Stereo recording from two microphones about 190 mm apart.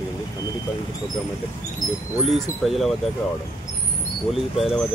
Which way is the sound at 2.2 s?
Centre (ahead or behind).